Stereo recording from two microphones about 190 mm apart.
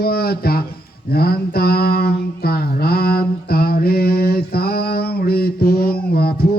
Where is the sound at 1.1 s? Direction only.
55° left (ahead or behind).